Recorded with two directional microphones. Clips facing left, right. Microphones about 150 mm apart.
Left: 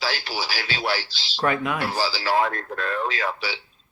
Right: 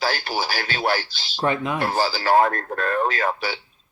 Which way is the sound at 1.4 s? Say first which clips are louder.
Right 1 dB; 25° right (ahead or behind).